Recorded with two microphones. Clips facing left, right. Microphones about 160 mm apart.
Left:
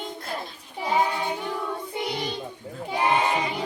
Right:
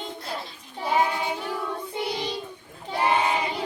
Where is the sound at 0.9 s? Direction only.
5° right (ahead or behind).